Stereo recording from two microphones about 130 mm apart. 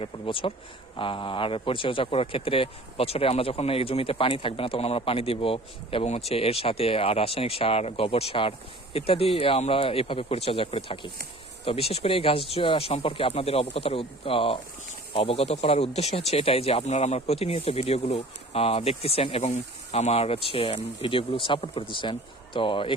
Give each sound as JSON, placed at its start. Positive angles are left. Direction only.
{"t": 0.0, "sound": "a man's voice", "side_deg": 45}